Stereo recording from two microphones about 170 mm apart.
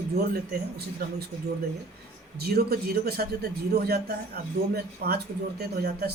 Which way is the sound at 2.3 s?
70° right (ahead or behind).